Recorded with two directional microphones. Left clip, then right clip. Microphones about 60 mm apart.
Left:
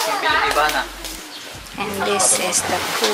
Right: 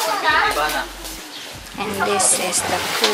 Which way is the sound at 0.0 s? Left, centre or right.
Centre.